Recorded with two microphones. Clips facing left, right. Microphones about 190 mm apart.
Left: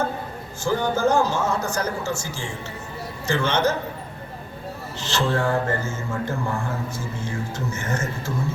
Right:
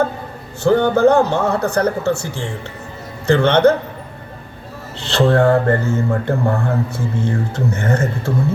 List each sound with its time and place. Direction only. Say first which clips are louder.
0.6 s speech: right 9 dB; 60° right (ahead or behind)
4.9 s speech: right 9 dB; 60° right (ahead or behind)